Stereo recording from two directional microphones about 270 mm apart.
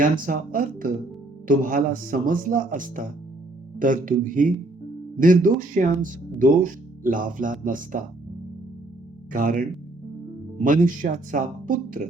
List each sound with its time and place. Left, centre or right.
0.0 s speech: right
9.3 s speech: right